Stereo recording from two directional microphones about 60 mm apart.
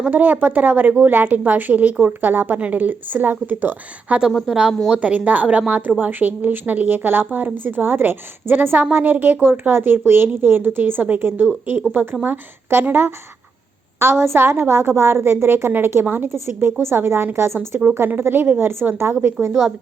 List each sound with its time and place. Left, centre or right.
0.1 s a woman's voice: right
4.3 s speech: centre
4.9 s a woman's voice: right
14.0 s a woman's voice: right